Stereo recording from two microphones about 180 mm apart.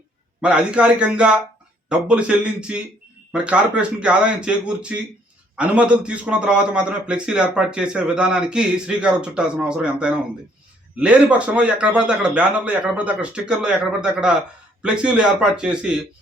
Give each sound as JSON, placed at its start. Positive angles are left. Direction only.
{"t": 0.4, "sound": "a man's voice", "side_deg": -5}